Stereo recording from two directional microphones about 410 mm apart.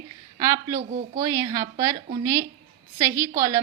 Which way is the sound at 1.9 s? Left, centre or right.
Centre.